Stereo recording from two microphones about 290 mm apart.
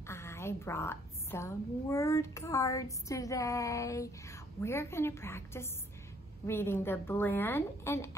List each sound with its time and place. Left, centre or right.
0.0 s a woman's voice: centre